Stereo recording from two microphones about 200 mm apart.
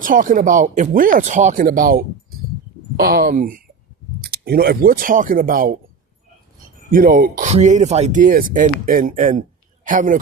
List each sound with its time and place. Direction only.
0.0 s speech: 40° right (ahead or behind)
6.9 s speech: 45° right (ahead or behind)